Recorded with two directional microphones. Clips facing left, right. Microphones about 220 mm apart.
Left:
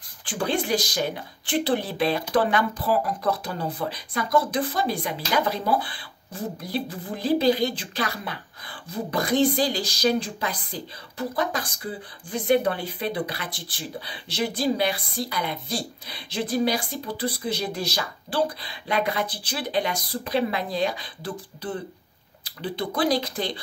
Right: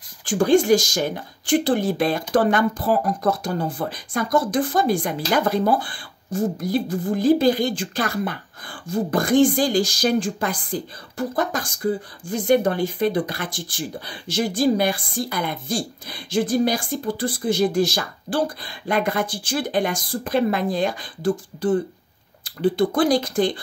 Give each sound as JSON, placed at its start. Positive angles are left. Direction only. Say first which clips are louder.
{"t": 0.2, "sound": "speech", "louder": "right 9 dB", "side_deg": -45}